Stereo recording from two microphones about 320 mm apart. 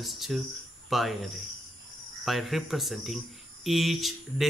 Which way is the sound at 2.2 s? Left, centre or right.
Centre.